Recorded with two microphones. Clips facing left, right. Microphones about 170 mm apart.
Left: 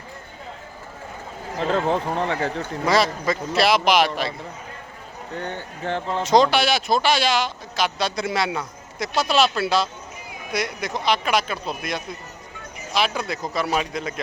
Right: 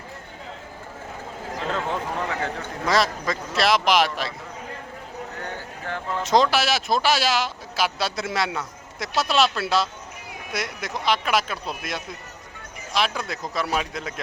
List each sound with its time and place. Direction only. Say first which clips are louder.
1.5 s speech: left 6 dB; 35° left (ahead or behind)
2.8 s speech: left 2 dB; centre (ahead or behind)
5.4 s speech: left 4 dB; 25° left (ahead or behind)
6.2 s speech: left 2 dB; centre (ahead or behind)